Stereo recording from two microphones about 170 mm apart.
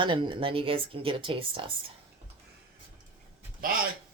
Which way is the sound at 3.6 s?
55° right (ahead or behind).